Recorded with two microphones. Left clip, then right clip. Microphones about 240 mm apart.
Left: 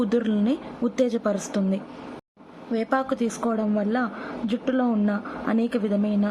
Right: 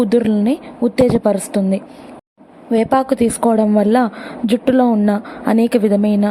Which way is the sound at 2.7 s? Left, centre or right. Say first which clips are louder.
Right 10 dB; right.